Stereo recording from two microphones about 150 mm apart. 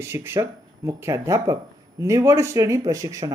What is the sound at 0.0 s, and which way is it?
Speech, 15° right (ahead or behind).